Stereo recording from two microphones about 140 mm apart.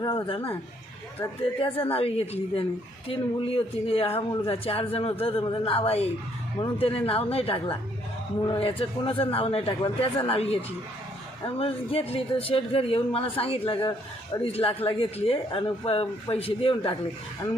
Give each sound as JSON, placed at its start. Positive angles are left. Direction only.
{"t": 0.0, "sound": "speech", "side_deg": 35}
{"t": 1.5, "sound": "speech", "side_deg": 40}